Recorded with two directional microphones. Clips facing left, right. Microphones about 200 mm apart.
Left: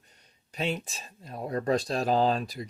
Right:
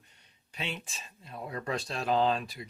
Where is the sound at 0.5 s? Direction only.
40° left (ahead or behind).